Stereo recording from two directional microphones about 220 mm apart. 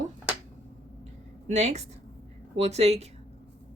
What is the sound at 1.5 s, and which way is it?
Speech, 30° right (ahead or behind).